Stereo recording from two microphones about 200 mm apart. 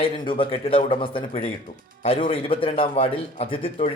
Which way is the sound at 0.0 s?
25° left (ahead or behind).